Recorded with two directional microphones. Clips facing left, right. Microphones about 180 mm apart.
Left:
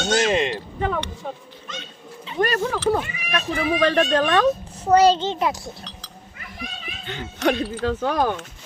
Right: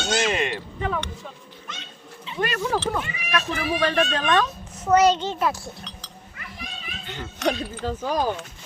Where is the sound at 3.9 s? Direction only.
45° left (ahead or behind).